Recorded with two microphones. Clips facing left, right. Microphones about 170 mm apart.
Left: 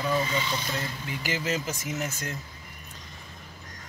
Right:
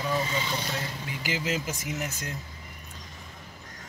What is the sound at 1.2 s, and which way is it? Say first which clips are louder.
Speech: left 1 dB; 15° right (ahead or behind).